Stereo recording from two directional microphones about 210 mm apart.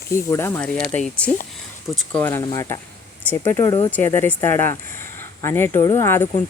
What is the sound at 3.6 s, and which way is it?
Speech, 20° left (ahead or behind).